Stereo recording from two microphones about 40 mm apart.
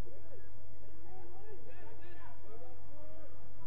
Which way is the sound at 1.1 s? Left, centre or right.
Centre.